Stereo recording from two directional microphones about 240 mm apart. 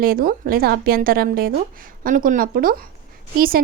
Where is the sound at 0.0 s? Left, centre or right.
Right.